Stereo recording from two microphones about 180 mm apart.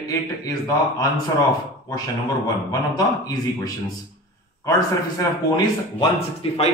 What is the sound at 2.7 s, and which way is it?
Speech, 20° left (ahead or behind).